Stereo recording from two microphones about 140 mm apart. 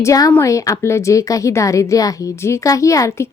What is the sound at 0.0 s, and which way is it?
Speech, 25° left (ahead or behind).